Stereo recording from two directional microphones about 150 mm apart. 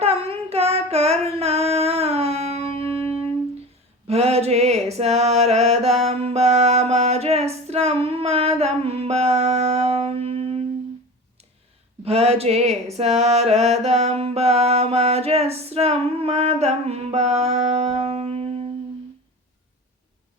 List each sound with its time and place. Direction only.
0.0 s child singing: 40° right (ahead or behind)
4.0 s music: 45° right (ahead or behind)
12.0 s a sound: 45° right (ahead or behind)